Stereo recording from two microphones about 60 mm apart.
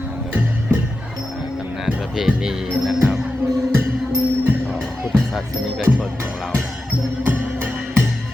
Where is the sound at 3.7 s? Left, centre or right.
Right.